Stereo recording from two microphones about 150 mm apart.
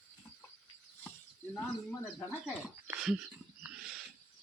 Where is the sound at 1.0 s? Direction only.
10° left (ahead or behind).